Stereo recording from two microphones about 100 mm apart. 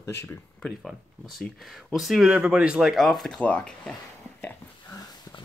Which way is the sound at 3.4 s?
15° left (ahead or behind).